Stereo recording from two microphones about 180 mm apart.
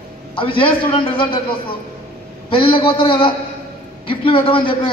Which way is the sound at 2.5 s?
30° left (ahead or behind).